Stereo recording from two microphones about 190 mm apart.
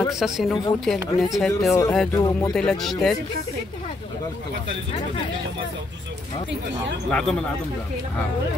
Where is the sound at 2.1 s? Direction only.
20° left (ahead or behind).